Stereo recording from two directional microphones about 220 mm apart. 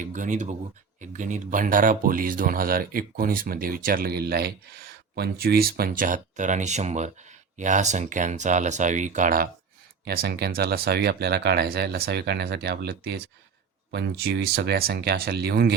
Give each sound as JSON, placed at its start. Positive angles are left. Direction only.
{"t": 0.0, "sound": "speech", "side_deg": -35}